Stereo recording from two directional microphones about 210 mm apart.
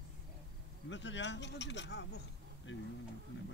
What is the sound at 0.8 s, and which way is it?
Speech, 60° left (ahead or behind).